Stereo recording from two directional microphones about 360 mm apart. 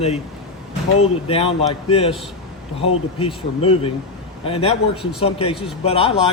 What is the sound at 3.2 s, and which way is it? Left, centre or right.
Speech, centre.